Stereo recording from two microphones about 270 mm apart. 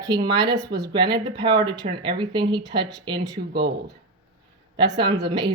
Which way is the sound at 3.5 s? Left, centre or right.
Right.